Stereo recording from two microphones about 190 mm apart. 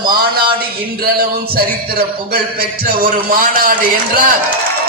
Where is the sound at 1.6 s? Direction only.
55° right (ahead or behind).